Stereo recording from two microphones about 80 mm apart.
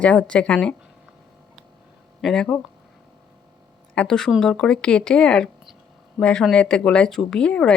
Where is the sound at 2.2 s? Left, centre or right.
Centre.